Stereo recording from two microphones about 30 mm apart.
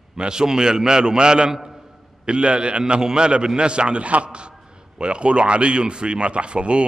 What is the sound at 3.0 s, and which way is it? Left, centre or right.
Speech, right.